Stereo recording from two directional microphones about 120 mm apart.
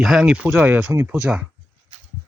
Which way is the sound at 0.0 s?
Centre (ahead or behind).